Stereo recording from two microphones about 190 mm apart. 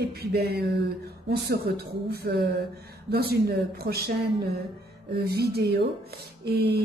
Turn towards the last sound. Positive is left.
turn(degrees=-60)  # may be behind; listen again after turning